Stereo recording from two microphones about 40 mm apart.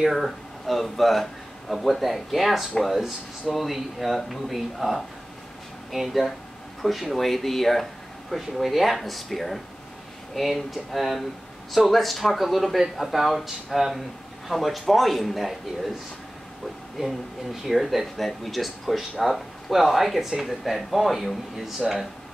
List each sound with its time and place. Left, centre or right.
0.1 s speech: centre
17.0 s speech: centre
17.6 s speech: centre